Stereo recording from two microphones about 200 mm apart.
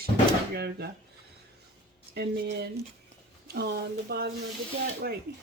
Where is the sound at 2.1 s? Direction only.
55° right (ahead or behind).